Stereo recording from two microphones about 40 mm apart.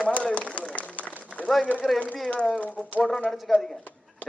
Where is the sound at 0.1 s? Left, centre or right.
Left.